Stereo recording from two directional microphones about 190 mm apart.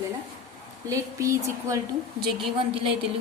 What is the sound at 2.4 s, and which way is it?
Speech, 30° right (ahead or behind).